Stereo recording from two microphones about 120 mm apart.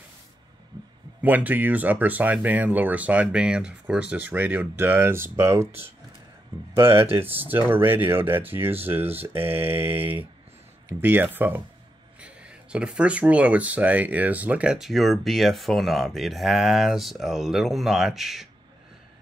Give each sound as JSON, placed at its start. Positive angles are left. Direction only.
{"t": 1.2, "sound": "speech", "side_deg": -15}
{"t": 6.7, "sound": "speech", "side_deg": -20}